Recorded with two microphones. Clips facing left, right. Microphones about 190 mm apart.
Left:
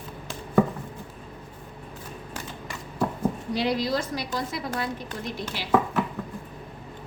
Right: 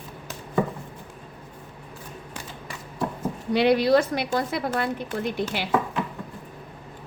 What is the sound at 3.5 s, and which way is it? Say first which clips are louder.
A woman's voice: right 9 dB; 65° right (ahead or behind).